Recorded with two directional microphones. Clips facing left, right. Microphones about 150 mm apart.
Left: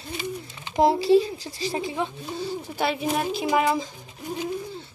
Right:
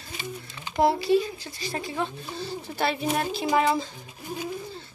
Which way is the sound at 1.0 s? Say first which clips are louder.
Left 4 dB; 35° left (ahead or behind).